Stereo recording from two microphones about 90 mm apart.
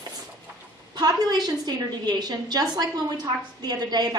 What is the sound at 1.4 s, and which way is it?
A woman's voice, 50° right (ahead or behind).